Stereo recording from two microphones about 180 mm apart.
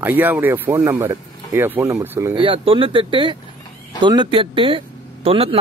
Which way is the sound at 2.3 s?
30° right (ahead or behind).